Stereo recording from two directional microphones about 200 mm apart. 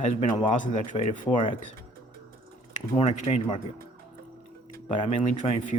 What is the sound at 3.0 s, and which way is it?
Speech, 30° left (ahead or behind).